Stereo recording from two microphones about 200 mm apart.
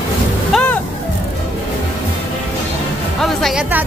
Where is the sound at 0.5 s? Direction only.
5° left (ahead or behind).